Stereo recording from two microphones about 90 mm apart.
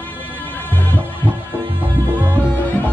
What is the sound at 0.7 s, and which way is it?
Music, 20° left (ahead or behind).